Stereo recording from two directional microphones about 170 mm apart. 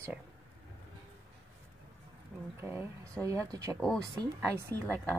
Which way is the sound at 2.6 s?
15° right (ahead or behind).